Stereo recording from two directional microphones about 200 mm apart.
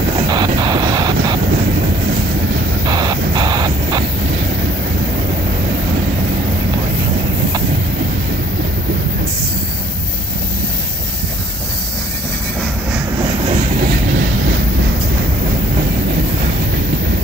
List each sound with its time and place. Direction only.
0.3 s vehicle: 20° right (ahead or behind)
2.9 s vehicle: 20° right (ahead or behind)